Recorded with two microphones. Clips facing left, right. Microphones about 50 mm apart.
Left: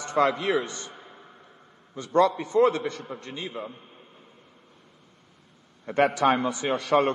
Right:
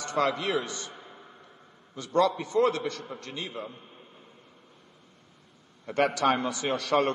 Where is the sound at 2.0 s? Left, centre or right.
Left.